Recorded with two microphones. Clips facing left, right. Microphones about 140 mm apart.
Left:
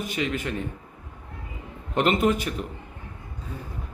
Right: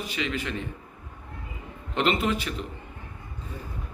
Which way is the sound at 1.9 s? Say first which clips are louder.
Left 3 dB; 45° left (ahead or behind).